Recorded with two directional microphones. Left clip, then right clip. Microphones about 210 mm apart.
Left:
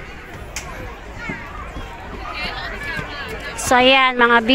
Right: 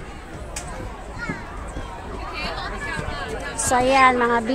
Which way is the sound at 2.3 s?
45° right (ahead or behind).